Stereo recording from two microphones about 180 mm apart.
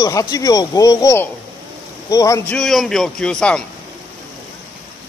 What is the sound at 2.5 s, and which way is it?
Speech, centre (ahead or behind).